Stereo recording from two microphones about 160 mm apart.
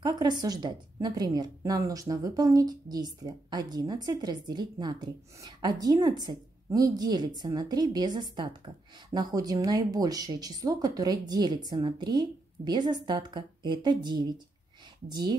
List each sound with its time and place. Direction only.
0.0 s speech: 25° right (ahead or behind)